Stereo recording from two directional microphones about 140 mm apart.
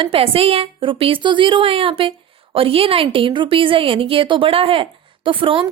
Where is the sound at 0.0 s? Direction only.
40° right (ahead or behind).